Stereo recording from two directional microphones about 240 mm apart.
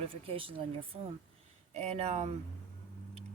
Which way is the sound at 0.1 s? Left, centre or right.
Right.